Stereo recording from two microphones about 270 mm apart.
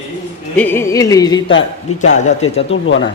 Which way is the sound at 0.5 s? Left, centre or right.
Centre.